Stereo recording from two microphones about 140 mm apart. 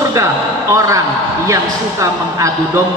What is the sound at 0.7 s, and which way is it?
A woman's voice, 25° right (ahead or behind).